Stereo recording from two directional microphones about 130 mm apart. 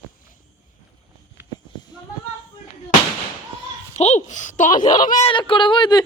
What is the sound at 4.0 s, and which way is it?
Speech, 65° left (ahead or behind).